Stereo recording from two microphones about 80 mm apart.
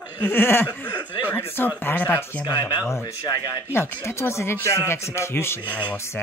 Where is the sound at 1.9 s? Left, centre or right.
Left.